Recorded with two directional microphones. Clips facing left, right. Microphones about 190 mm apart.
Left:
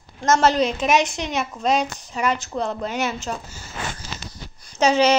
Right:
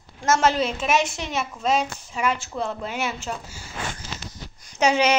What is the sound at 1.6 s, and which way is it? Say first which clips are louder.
Speech: left 1 dB; 40° left (ahead or behind).